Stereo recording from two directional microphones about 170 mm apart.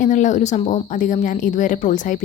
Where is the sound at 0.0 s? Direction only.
45° left (ahead or behind).